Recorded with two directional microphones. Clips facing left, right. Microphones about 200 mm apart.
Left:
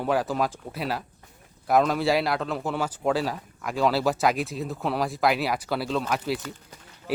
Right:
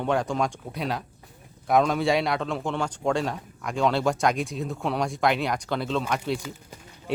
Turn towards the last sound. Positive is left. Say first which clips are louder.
# even
turn(degrees=5)  # may be behind; listen again after turning